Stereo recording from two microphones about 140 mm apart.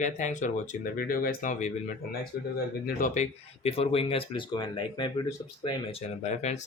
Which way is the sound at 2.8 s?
65° left (ahead or behind).